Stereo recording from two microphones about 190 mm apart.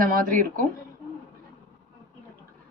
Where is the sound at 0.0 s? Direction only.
45° right (ahead or behind).